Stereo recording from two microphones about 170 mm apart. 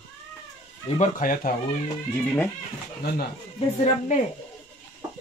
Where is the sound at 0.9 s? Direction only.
50° left (ahead or behind).